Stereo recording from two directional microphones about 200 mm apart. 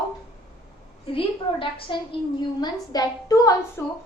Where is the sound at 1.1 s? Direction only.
25° left (ahead or behind).